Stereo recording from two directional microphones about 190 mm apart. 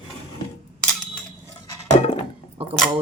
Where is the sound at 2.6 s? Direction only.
30° right (ahead or behind).